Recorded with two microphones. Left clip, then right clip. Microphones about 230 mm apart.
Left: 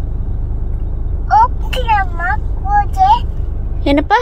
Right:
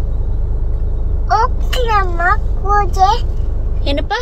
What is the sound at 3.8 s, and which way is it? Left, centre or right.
Speech, centre.